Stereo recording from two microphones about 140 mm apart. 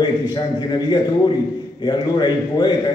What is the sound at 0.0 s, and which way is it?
A man's voice, 30° left (ahead or behind).